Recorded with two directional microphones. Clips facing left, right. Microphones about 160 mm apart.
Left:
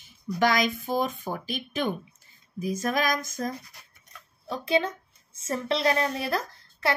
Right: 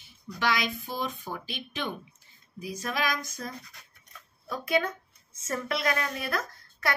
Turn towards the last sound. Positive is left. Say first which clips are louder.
# left 3 dB
turn(degrees=30)  # may be behind; listen again after turning